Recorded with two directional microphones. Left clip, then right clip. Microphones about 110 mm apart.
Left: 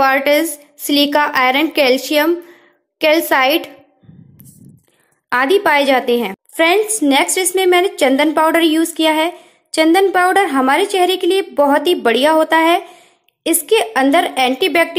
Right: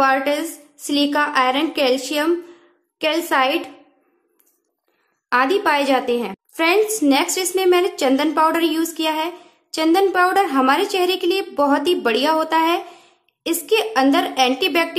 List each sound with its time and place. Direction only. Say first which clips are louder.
0.0 s a woman's voice: left 5 dB; 35° left (ahead or behind)
5.3 s a woman's voice: left 4 dB; 30° left (ahead or behind)